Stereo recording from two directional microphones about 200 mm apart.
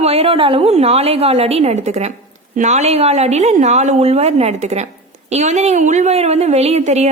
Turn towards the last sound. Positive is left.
turn(degrees=-35)  # may be behind; listen again after turning